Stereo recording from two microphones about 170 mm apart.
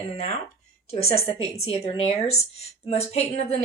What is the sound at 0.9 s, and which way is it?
A woman's voice, 35° left (ahead or behind).